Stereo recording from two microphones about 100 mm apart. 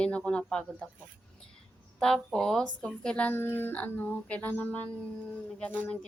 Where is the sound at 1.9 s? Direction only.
5° left (ahead or behind).